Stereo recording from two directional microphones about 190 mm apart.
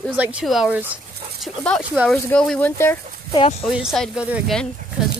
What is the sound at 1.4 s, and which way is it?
Speech, 5° left (ahead or behind).